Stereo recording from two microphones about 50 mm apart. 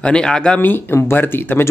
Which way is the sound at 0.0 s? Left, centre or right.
Centre.